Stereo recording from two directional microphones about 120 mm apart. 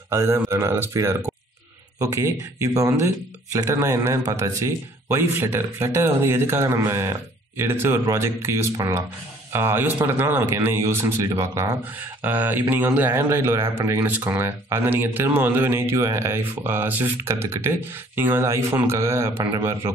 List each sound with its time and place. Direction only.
0.1 s a man's voice: 20° right (ahead or behind)